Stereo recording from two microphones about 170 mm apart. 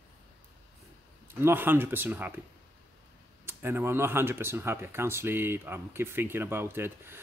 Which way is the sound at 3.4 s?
15° right (ahead or behind).